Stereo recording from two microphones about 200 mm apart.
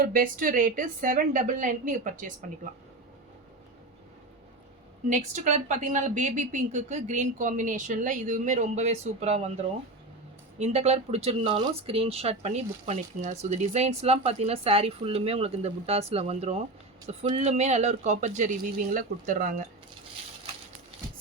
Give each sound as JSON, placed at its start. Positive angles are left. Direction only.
{"t": 0.0, "sound": "a woman's voice", "side_deg": -45}
{"t": 5.0, "sound": "speech", "side_deg": -40}
{"t": 10.6, "sound": "speech", "side_deg": -30}